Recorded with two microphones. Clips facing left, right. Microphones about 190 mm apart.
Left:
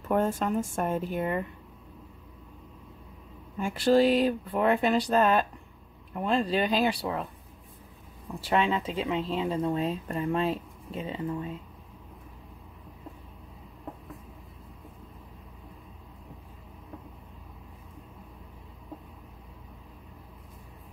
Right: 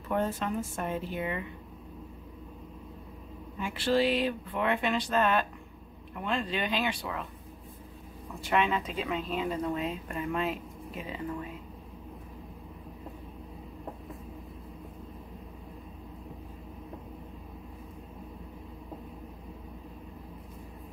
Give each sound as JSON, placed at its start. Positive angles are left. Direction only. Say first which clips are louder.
{"t": 0.1, "sound": "speech", "louder": "left 4 dB", "side_deg": 45}
{"t": 3.5, "sound": "speech", "louder": "left 5 dB", "side_deg": 45}
{"t": 8.4, "sound": "speech", "louder": "left 2 dB", "side_deg": 30}